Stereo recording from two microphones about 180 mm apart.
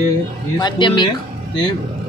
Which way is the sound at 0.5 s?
25° left (ahead or behind).